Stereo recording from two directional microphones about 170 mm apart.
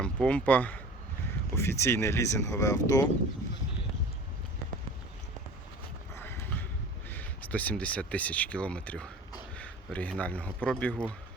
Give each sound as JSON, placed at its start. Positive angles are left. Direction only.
{"t": 0.0, "sound": "speech", "side_deg": 5}
{"t": 6.1, "sound": "clip-clop", "side_deg": 10}
{"t": 7.1, "sound": "speech", "side_deg": 10}